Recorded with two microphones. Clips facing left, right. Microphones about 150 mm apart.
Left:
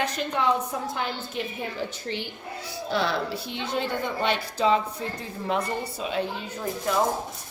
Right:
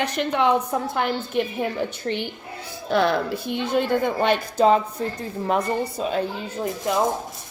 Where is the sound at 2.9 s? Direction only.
50° right (ahead or behind).